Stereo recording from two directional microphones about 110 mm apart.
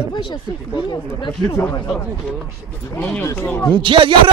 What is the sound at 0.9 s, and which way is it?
Speech, 45° left (ahead or behind).